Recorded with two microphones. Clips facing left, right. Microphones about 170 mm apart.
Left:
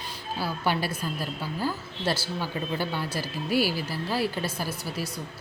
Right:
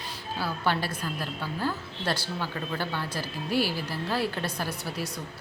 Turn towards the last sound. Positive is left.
turn(degrees=0)  # may be behind; listen again after turning